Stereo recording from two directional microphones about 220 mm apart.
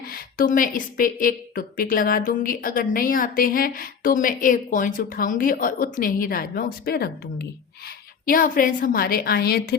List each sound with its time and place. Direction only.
0.1 s a woman's voice: 40° left (ahead or behind)